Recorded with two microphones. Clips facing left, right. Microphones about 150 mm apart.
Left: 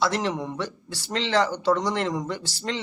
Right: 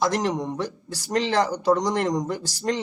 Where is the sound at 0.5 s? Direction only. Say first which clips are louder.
Right 2 dB; 40° right (ahead or behind).